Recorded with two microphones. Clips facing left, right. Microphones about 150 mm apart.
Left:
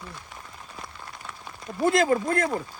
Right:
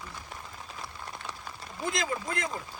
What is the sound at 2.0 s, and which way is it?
Speech, 50° left (ahead or behind).